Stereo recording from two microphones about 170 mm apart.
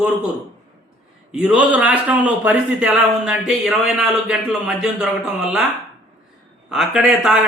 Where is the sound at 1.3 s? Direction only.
5° right (ahead or behind).